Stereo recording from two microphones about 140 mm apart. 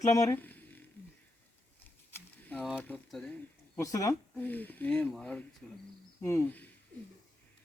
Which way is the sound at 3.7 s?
25° left (ahead or behind).